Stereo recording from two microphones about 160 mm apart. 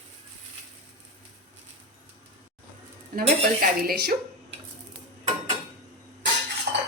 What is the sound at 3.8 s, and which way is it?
Speech, 70° right (ahead or behind).